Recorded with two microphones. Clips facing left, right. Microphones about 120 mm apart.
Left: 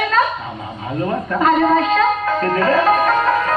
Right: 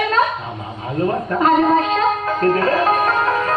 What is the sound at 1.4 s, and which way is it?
Speech, 30° right (ahead or behind).